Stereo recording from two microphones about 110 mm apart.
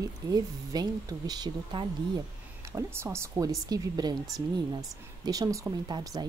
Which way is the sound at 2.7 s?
25° right (ahead or behind).